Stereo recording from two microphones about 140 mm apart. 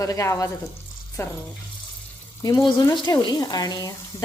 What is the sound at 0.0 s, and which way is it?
Speech, 25° left (ahead or behind).